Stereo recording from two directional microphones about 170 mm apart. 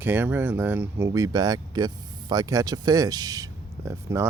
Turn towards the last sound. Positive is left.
turn(degrees=-15)  # may be behind; listen again after turning